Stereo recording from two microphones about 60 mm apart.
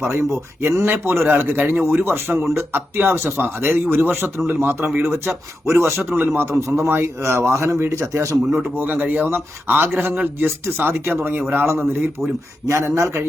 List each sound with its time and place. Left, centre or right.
0.0 s a man's voice: right
5.0 s a man's voice: right
6.1 s a man's voice: right
8.7 s a man's voice: right
12.6 s speech: right